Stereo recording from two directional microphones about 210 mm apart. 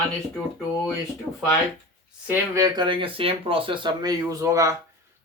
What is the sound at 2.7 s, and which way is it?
Speech, 25° right (ahead or behind).